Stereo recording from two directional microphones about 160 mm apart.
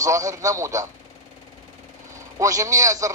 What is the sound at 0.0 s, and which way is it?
Speech, 20° right (ahead or behind).